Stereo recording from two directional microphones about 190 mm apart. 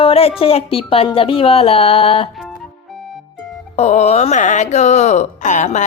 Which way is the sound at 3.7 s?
35° left (ahead or behind).